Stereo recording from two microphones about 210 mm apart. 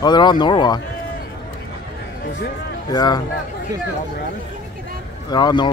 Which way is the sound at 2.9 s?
20° left (ahead or behind).